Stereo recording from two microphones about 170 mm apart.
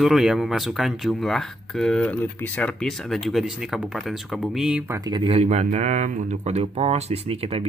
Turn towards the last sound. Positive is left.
turn(degrees=-35)  # may be behind; listen again after turning